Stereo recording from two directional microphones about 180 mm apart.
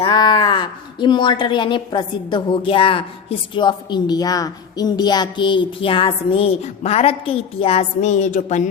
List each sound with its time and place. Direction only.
0.1 s a woman's voice: 25° left (ahead or behind); by 8.7 s 40° left (ahead or behind)